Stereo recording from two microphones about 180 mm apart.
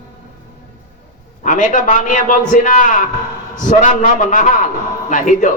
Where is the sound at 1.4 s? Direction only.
45° left (ahead or behind).